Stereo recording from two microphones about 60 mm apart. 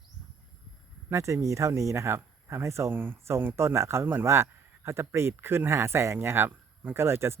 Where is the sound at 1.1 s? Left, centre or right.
Right.